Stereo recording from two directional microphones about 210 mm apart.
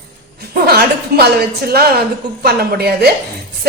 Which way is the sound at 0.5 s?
50° right (ahead or behind).